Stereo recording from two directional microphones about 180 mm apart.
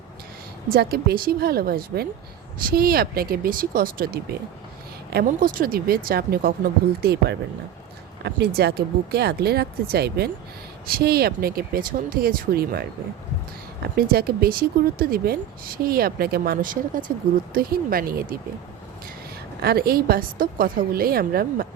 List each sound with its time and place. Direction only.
0.7 s speech: 60° right (ahead or behind)
13.9 s speech: 60° right (ahead or behind)
19.6 s speech: 60° right (ahead or behind)